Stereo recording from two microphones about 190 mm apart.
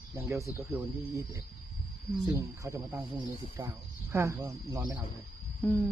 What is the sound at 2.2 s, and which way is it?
Speech, 15° right (ahead or behind).